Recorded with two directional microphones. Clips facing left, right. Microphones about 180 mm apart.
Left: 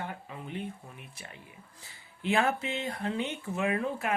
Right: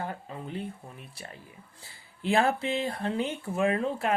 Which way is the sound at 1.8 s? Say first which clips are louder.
Right 2 dB; 35° right (ahead or behind).